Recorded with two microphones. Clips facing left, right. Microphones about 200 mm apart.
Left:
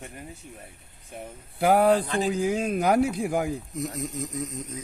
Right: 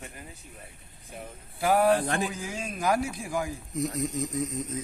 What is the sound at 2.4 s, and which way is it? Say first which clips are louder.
Speech: left 6 dB; 60° left (ahead or behind).